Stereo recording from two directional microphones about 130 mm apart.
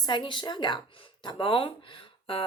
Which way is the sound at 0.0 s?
35° left (ahead or behind).